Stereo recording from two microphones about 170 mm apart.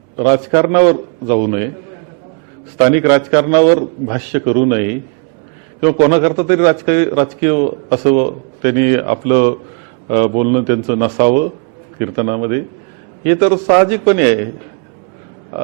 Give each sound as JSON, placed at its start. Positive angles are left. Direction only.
{"t": 0.2, "sound": "a man's voice", "side_deg": -20}
{"t": 2.7, "sound": "a man's voice", "side_deg": -15}
{"t": 5.8, "sound": "a man's voice", "side_deg": -15}